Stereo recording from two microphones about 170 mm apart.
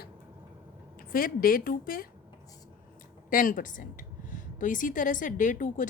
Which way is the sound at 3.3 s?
55° left (ahead or behind).